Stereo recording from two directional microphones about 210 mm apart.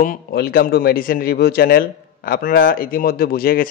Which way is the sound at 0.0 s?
45° left (ahead or behind).